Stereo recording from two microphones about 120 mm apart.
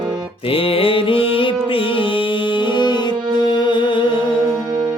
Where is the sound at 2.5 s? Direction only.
40° left (ahead or behind).